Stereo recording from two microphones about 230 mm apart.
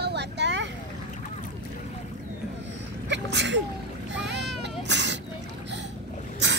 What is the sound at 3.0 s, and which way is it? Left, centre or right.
Sneeze, right.